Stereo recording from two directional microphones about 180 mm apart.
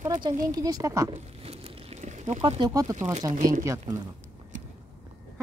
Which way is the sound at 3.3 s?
50° right (ahead or behind).